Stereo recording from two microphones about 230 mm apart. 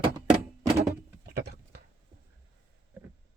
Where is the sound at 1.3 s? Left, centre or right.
Right.